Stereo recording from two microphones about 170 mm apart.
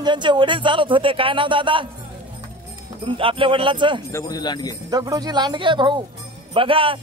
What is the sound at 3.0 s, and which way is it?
Speech, 30° right (ahead or behind).